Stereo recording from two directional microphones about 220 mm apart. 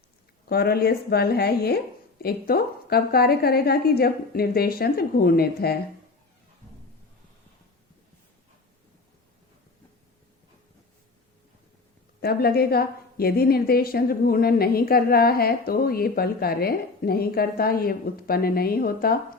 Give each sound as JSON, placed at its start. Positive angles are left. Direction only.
{"t": 0.4, "sound": "a woman's voice", "side_deg": 45}
{"t": 12.2, "sound": "a woman's voice", "side_deg": 45}